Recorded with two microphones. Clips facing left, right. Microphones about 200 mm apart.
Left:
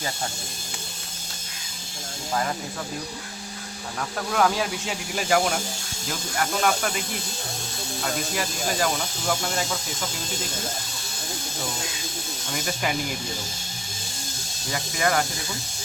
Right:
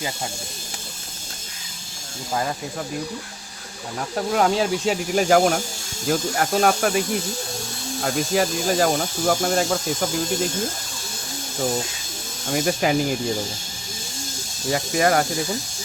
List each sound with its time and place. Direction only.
4.2 s speech: 30° right (ahead or behind)
4.9 s speech: 45° right (ahead or behind)
8.0 s speech: 45° right (ahead or behind)
12.5 s speech: 40° right (ahead or behind)
14.7 s speech: 40° right (ahead or behind)